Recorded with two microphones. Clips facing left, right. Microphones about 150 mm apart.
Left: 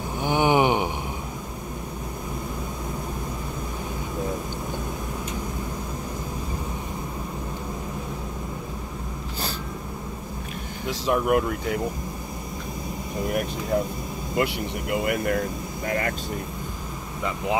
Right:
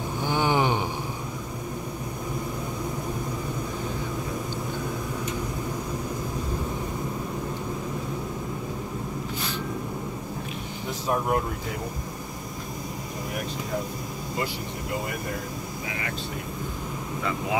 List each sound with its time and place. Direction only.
0.2 s a sound: 15° left (ahead or behind)
10.9 s speech: 85° left
14.3 s speech: 65° left (ahead or behind)
15.9 s speech: 50° left (ahead or behind)